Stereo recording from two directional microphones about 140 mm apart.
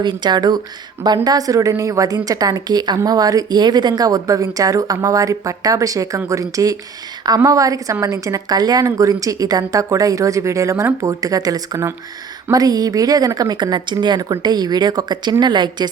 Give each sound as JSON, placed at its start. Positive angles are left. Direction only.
{"t": 0.0, "sound": "a woman's voice", "side_deg": -30}